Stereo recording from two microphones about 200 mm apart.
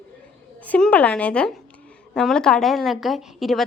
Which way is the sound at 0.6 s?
5° left (ahead or behind).